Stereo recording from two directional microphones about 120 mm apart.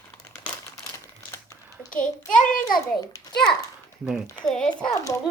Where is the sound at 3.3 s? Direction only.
5° left (ahead or behind).